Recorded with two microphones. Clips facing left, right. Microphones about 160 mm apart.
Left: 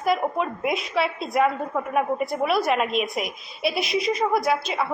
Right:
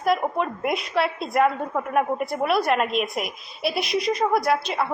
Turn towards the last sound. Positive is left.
turn(degrees=0)  # may be behind; listen again after turning